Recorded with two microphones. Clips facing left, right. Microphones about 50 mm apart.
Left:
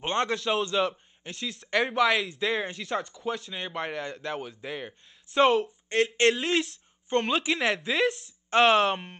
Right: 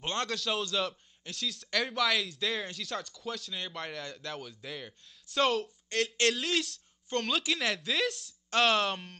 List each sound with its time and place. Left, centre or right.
0.0 s speech: left